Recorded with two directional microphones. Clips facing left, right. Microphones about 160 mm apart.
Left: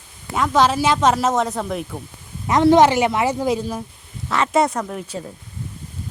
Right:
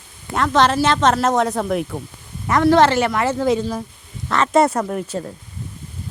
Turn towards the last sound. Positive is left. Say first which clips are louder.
# right 3 dB
turn(degrees=-5)  # may be behind; listen again after turning